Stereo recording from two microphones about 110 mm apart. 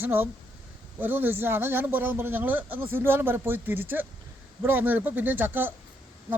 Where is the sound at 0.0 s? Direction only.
20° right (ahead or behind).